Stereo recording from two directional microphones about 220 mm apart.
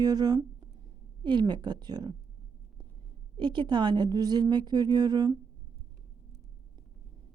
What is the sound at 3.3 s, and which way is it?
Speech, 20° right (ahead or behind).